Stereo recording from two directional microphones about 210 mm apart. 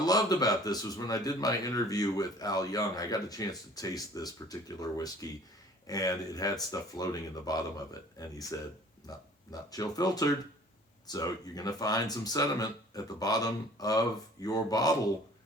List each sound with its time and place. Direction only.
0.0 s speech: 20° left (ahead or behind)
9.0 s speech: 20° left (ahead or behind)